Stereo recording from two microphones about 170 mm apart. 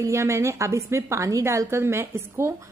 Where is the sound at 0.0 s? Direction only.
15° right (ahead or behind).